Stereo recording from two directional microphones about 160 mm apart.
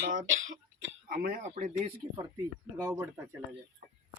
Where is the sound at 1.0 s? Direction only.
65° right (ahead or behind).